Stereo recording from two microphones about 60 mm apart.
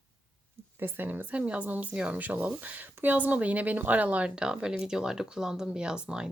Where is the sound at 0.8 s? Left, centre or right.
Right.